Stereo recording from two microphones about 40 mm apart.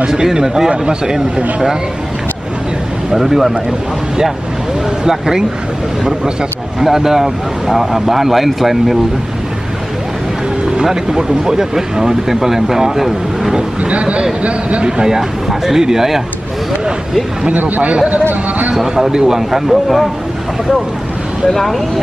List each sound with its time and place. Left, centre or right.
0.0 s speech: centre
3.1 s speech: centre
5.0 s speech: centre
6.8 s speech: centre
10.8 s speech: centre
13.8 s a man's voice: right
14.9 s speech: centre
17.6 s a man's voice: right
18.8 s speech: centre
21.5 s speech: centre